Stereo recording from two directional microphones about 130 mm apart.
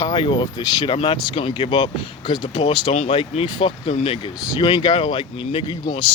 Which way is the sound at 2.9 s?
50° left (ahead or behind).